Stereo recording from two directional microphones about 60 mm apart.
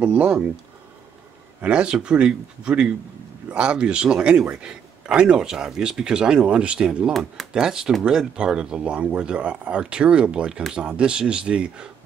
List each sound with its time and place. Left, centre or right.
0.0 s speech: right
1.6 s speech: centre